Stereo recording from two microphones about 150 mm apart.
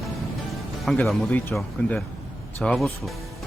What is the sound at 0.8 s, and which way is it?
Speech, 5° left (ahead or behind).